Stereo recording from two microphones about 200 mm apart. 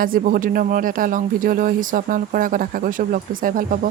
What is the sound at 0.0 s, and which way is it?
Speech, 45° right (ahead or behind).